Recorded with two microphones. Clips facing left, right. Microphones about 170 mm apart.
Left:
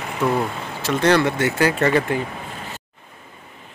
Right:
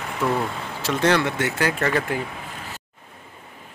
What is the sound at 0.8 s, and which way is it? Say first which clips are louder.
Speech: left 3 dB; centre (ahead or behind).